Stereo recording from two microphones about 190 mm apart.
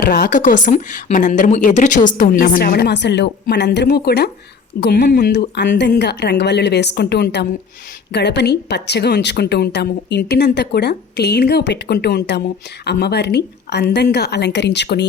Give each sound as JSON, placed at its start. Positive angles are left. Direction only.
{"t": 0.0, "sound": "a woman's voice", "side_deg": 55}